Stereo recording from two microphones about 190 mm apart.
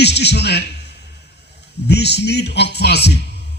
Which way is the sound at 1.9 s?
60° left (ahead or behind).